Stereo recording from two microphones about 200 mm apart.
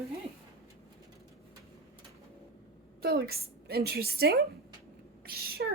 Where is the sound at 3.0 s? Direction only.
50° right (ahead or behind).